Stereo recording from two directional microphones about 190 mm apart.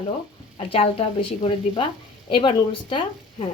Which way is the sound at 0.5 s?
30° left (ahead or behind).